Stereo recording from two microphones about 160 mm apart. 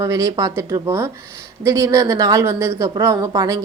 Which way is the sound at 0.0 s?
20° right (ahead or behind).